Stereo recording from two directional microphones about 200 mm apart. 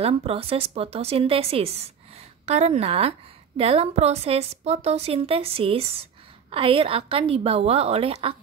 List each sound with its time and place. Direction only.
0.0 s a woman's voice: 30° right (ahead or behind)